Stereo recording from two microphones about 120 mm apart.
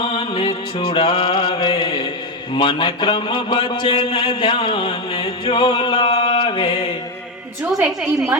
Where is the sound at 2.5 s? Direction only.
40° left (ahead or behind).